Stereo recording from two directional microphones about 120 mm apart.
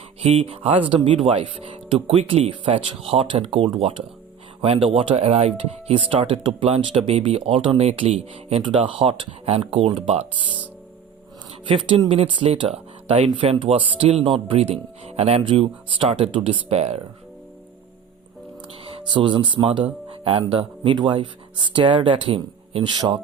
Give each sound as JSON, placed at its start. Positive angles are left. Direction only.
{"t": 0.2, "sound": "speech", "side_deg": -55}
{"t": 7.1, "sound": "speech", "side_deg": -60}
{"t": 11.9, "sound": "speech", "side_deg": -50}
{"t": 18.9, "sound": "speech", "side_deg": -45}